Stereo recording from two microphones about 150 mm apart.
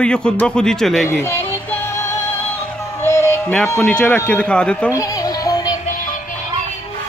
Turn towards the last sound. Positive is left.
turn(degrees=25)  # may be behind; listen again after turning